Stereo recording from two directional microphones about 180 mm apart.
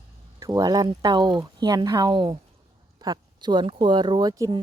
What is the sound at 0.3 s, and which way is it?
Speech, 20° right (ahead or behind).